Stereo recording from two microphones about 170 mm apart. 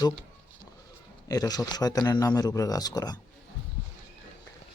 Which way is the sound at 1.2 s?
20° left (ahead or behind).